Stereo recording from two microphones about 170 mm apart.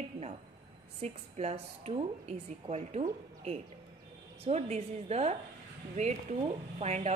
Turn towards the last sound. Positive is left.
turn(degrees=-40)  # may be behind; listen again after turning